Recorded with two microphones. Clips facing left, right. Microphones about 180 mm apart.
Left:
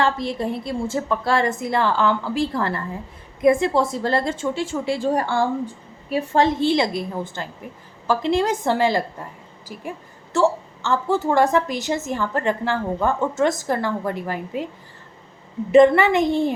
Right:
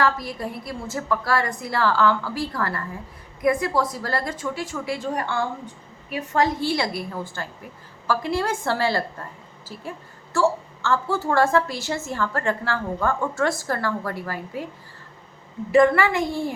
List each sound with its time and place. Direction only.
0.0 s a woman's voice: 25° left (ahead or behind)
15.7 s a woman's voice: 20° left (ahead or behind)